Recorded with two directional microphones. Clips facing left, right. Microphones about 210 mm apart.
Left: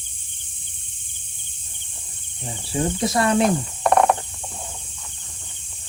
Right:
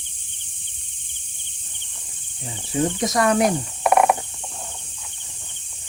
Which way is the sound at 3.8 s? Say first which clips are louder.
Right 1 dB; 10° right (ahead or behind).